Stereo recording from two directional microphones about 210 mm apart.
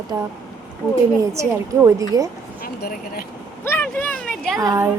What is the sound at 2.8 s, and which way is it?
Speech, 45° left (ahead or behind).